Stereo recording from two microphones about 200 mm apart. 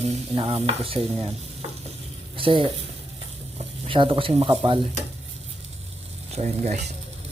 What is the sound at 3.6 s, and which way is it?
Speech, 25° right (ahead or behind).